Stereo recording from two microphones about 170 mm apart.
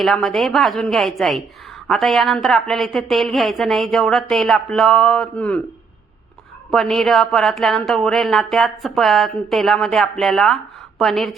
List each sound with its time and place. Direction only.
0.0 s speech: centre (ahead or behind)
6.7 s speech: centre (ahead or behind)